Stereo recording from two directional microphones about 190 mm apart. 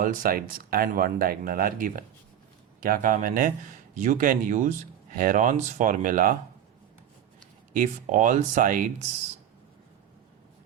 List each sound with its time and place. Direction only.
0.0 s speech: 45° right (ahead or behind)
7.7 s speech: 40° right (ahead or behind)